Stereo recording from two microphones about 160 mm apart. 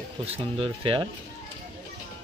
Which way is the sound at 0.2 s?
35° right (ahead or behind).